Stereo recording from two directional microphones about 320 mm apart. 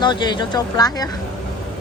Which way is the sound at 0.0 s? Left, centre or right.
Centre.